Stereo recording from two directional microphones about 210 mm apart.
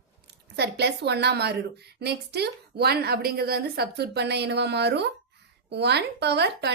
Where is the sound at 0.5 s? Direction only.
50° right (ahead or behind).